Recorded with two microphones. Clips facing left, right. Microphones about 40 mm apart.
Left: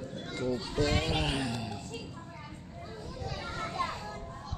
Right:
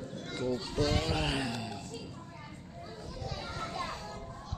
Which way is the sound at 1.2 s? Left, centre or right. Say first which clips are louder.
Left 1 dB; centre.